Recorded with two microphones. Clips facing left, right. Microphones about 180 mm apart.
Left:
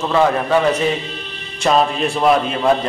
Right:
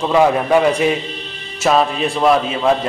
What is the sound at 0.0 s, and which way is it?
A man's voice, 15° right (ahead or behind).